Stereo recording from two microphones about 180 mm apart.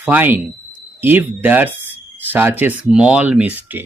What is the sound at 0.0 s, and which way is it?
Speech, 10° right (ahead or behind).